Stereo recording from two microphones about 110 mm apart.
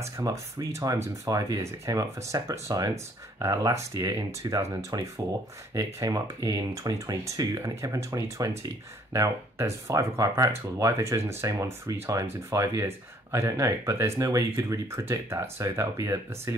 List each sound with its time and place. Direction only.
0.2 s speech: 30° right (ahead or behind)